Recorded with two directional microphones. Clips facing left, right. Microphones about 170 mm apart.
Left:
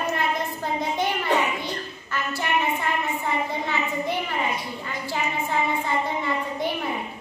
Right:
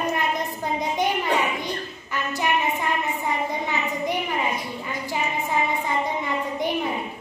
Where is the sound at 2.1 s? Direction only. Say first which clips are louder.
Right 1 dB; 15° right (ahead or behind).